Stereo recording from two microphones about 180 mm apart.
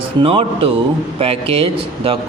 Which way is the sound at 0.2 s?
30° right (ahead or behind).